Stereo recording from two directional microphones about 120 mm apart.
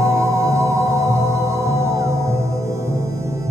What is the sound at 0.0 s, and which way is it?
Music, 25° right (ahead or behind).